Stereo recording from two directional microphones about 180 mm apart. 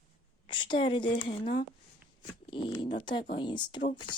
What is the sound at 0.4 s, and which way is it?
Speech, 25° left (ahead or behind).